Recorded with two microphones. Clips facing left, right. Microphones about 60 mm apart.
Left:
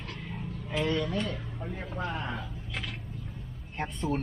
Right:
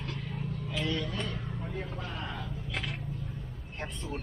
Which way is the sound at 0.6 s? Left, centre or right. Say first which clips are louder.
Left 5 dB; left.